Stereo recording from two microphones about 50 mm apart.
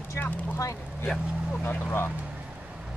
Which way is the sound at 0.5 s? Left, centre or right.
Left.